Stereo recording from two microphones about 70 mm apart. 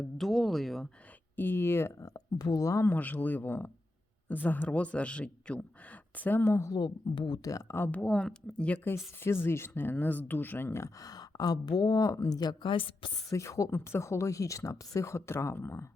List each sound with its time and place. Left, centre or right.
0.0 s speech: centre
1.4 s speech: left
2.0 s speech: left
2.8 s a man's voice: left
6.7 s speech: left
7.5 s speech: left
7.9 s speech: centre
9.2 s speech: left
11.0 s speech: left
13.3 s speech: left